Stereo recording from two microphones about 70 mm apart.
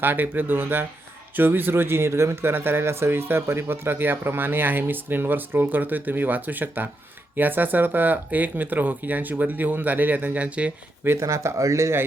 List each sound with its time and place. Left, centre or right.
0.0 s speech: right
11.0 s speech: right